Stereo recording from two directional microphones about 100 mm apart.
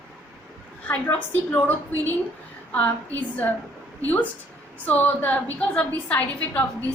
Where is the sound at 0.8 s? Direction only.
15° left (ahead or behind).